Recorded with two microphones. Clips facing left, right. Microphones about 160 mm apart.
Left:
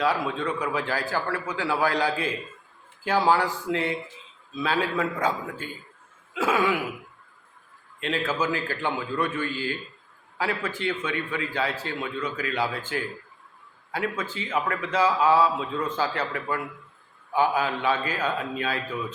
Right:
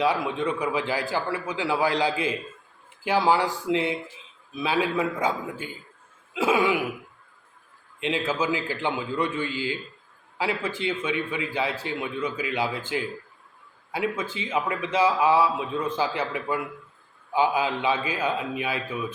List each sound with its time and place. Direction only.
0.0 s a man's voice: 15° right (ahead or behind)
8.0 s a man's voice: 15° right (ahead or behind)